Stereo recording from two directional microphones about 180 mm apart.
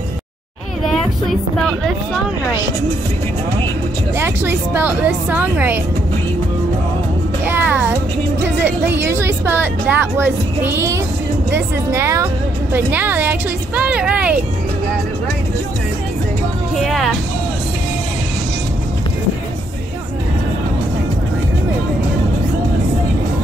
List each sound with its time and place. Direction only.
4.2 s a woman's voice: 10° right (ahead or behind)
7.4 s music: 10° right (ahead or behind)
8.6 s a woman's voice: 10° right (ahead or behind)
16.7 s speech: centre (ahead or behind)